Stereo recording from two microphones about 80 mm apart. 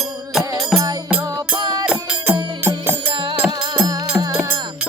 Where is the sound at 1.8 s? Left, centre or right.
Centre.